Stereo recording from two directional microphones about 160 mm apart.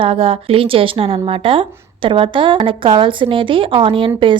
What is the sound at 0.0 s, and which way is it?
A woman's voice, 35° right (ahead or behind).